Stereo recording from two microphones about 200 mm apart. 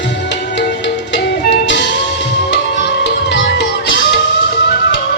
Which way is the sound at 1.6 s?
65° left (ahead or behind).